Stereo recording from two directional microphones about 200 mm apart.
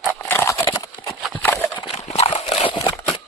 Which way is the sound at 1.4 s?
10° left (ahead or behind).